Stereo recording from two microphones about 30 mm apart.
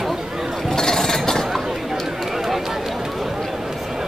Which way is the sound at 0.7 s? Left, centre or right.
Centre.